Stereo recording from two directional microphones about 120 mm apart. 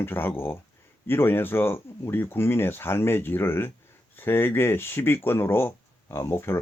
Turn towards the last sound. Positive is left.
turn(degrees=20)  # may be behind; listen again after turning